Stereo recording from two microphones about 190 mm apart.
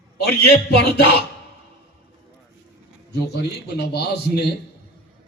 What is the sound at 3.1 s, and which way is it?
Speech, 60° left (ahead or behind).